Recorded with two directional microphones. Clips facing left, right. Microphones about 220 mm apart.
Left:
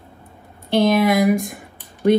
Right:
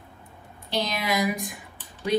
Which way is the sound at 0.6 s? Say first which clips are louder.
Left 12 dB; 55° left (ahead or behind).